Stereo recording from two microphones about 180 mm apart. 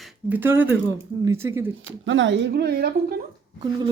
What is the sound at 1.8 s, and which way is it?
Speech, 90° right.